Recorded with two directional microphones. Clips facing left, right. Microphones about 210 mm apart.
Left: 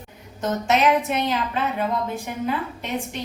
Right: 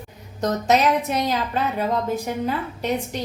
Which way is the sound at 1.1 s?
40° right (ahead or behind).